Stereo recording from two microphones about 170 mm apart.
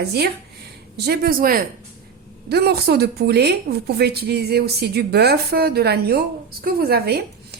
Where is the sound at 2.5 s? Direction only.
70° right (ahead or behind).